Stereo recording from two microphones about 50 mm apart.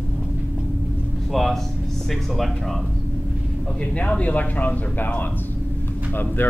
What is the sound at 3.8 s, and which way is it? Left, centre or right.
Speech, left.